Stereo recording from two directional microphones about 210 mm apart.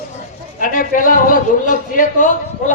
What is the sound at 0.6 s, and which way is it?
A man's voice, 40° left (ahead or behind).